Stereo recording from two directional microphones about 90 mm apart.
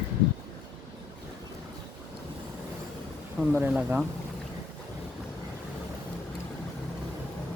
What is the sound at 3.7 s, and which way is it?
Speech, 15° right (ahead or behind).